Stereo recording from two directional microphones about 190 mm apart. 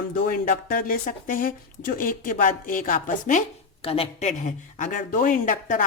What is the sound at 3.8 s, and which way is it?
A woman's voice, 30° left (ahead or behind).